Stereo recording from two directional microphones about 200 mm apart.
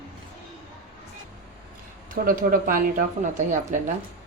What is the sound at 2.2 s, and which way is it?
Speech, 45° right (ahead or behind).